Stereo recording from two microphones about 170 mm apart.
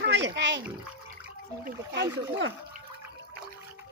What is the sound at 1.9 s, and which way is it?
Speech, 85° right.